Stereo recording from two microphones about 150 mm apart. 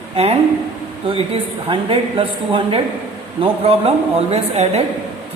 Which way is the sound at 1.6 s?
35° right (ahead or behind).